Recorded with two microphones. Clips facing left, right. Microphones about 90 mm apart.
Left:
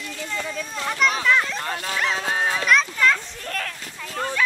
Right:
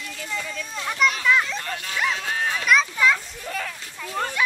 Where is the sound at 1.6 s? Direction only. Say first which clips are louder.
Left 2 dB; 35° left (ahead or behind).